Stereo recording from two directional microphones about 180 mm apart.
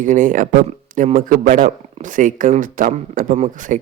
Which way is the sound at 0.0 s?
45° right (ahead or behind).